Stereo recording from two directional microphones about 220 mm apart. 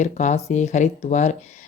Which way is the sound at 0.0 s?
35° left (ahead or behind).